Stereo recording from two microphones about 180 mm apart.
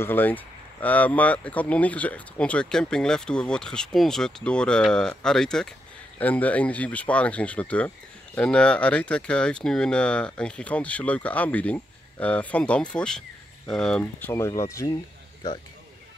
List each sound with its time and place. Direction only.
0.0 s speech: 10° left (ahead or behind)
14.3 s speech: 15° left (ahead or behind)